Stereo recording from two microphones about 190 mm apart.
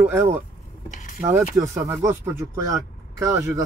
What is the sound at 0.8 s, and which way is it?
Vehicle, 40° left (ahead or behind).